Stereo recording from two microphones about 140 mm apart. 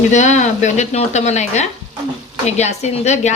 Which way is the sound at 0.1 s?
60° left (ahead or behind).